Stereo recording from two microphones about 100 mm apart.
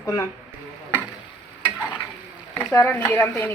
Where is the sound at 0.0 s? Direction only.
30° left (ahead or behind).